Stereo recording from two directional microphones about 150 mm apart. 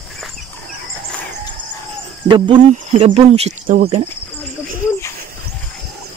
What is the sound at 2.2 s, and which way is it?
Speech, 30° right (ahead or behind).